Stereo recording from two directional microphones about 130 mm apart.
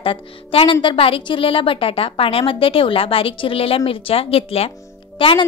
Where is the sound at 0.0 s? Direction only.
45° left (ahead or behind).